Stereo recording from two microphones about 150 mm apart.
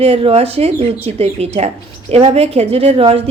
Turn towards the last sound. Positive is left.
turn(degrees=-40)  # may be behind; listen again after turning